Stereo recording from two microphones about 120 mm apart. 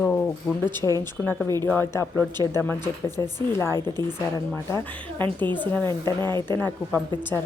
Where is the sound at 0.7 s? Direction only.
40° right (ahead or behind).